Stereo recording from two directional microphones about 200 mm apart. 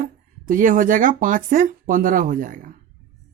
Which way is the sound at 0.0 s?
40° right (ahead or behind).